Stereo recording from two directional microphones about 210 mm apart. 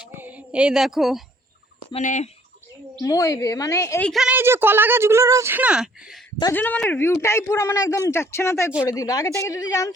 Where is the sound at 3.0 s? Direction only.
15° left (ahead or behind).